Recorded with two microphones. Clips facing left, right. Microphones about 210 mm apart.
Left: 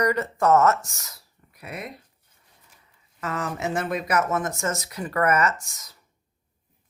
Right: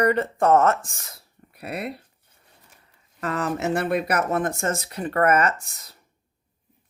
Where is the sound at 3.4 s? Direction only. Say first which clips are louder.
Right 4 dB; 60° right (ahead or behind).